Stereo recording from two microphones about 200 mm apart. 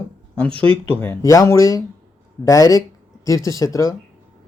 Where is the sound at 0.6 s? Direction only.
25° right (ahead or behind).